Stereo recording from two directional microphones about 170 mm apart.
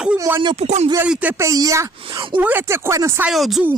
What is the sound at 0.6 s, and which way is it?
Speech, 40° right (ahead or behind).